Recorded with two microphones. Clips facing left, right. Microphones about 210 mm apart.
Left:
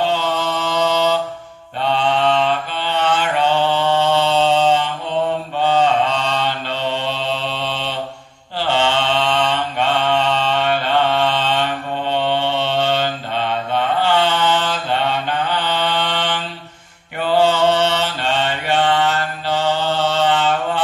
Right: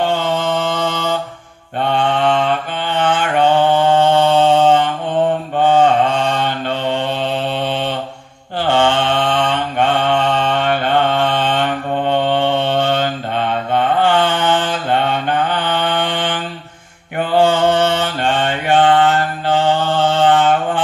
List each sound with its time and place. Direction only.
0.0 s mantra: 50° right (ahead or behind)